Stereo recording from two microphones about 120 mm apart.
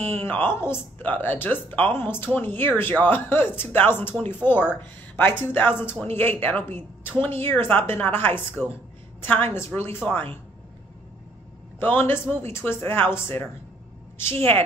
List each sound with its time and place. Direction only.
0.2 s a woman's voice: 20° left (ahead or behind)
11.8 s a woman's voice: 15° left (ahead or behind)